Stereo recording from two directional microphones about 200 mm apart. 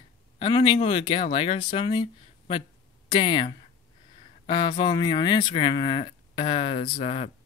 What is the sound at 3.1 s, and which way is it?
Speech, 25° left (ahead or behind).